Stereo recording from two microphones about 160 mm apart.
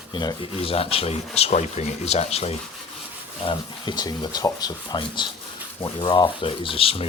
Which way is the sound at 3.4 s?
30° left (ahead or behind).